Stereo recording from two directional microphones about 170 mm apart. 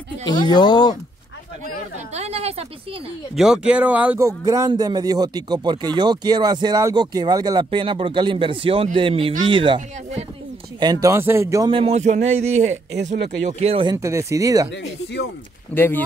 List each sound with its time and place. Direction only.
0.2 s speech: 25° left (ahead or behind)
2.0 s a woman's voice: 40° right (ahead or behind)
3.3 s speech: 5° right (ahead or behind)
4.2 s speech: 20° right (ahead or behind)
10.8 s speech: 20° right (ahead or behind)
11.7 s a woman's voice: 35° right (ahead or behind)
13.9 s speech: 15° right (ahead or behind)
14.7 s speech: 90° left
15.7 s speech: 10° left (ahead or behind)